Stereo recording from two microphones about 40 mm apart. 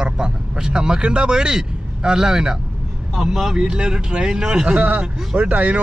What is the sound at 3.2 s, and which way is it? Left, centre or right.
Speech, centre.